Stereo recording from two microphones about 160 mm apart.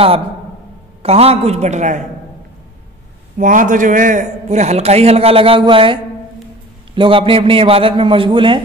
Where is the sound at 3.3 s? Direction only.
55° right (ahead or behind); by 5.9 s 35° right (ahead or behind).